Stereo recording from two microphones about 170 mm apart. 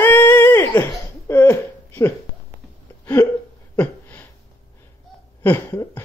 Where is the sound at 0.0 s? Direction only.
10° left (ahead or behind).